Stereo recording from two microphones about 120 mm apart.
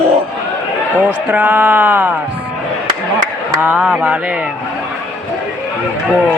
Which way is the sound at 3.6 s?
15° right (ahead or behind).